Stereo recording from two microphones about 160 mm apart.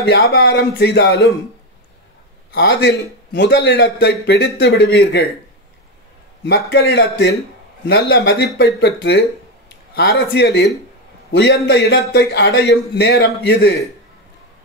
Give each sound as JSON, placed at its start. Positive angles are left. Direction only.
{"t": 0.0, "sound": "a man's voice", "side_deg": 90}
{"t": 2.5, "sound": "a man's voice", "side_deg": 90}
{"t": 6.4, "sound": "a man's voice", "side_deg": 90}